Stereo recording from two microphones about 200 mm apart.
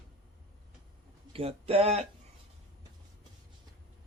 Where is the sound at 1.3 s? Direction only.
30° right (ahead or behind).